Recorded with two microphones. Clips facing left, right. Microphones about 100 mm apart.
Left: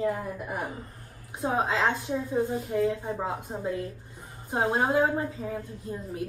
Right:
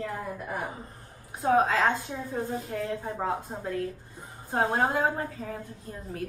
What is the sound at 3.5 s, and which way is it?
Speech, 5° right (ahead or behind).